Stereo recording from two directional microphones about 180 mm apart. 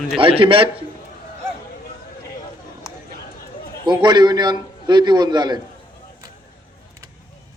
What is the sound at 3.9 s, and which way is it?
A man's voice, 25° right (ahead or behind).